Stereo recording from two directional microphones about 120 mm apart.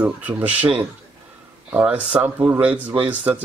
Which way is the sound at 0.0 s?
10° right (ahead or behind).